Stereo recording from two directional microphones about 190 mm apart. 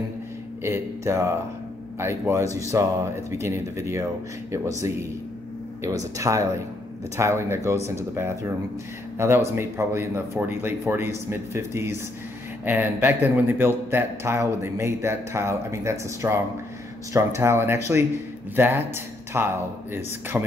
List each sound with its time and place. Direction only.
0.6 s a man's voice: 15° right (ahead or behind)
5.8 s a man's voice: 15° right (ahead or behind)